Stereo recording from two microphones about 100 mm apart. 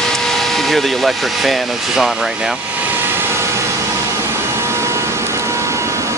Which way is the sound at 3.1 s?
25° right (ahead or behind).